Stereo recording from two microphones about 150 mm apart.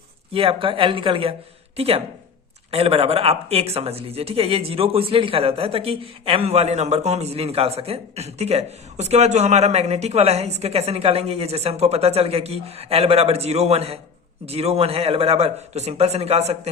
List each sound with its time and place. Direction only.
0.3 s speech: 35° right (ahead or behind)